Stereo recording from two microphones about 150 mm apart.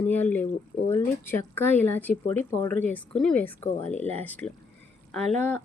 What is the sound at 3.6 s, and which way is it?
Speech, 45° left (ahead or behind).